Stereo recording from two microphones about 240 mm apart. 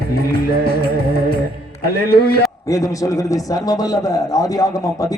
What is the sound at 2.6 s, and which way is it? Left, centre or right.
A man's voice, centre.